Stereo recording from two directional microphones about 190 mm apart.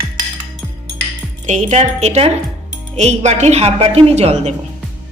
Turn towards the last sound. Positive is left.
turn(degrees=-35)  # may be behind; listen again after turning